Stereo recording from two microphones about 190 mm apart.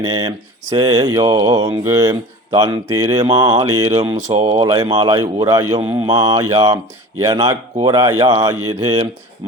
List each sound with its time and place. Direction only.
0.0 s speech: 20° right (ahead or behind)